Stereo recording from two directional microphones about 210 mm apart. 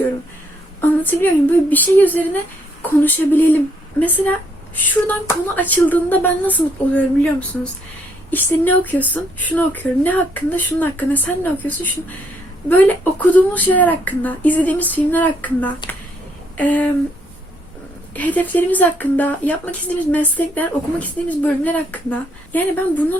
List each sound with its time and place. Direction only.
0.8 s speech: 10° left (ahead or behind)
18.1 s speech: 5° left (ahead or behind)